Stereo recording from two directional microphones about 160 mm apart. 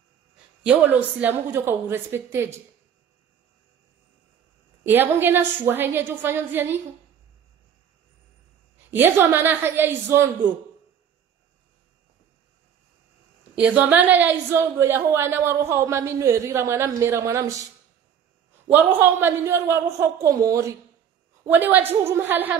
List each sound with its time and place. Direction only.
0.7 s a woman's voice: 10° right (ahead or behind)
4.8 s a woman's voice: 10° right (ahead or behind)
8.9 s a woman's voice: 15° right (ahead or behind)
13.6 s a woman's voice: 10° right (ahead or behind)
18.7 s a woman's voice: 10° right (ahead or behind)